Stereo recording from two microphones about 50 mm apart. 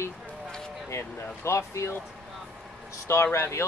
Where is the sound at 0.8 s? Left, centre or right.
Left.